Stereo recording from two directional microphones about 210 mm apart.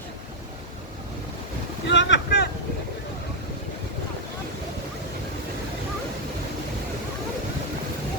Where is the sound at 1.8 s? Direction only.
60° left (ahead or behind).